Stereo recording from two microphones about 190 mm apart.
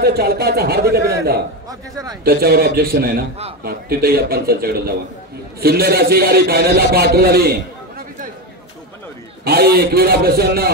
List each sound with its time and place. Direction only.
0.0 s speech: 55° right (ahead or behind)
1.7 s a man's voice: 20° right (ahead or behind)
2.2 s a man's voice: 55° right (ahead or behind)
9.4 s speech: 55° right (ahead or behind)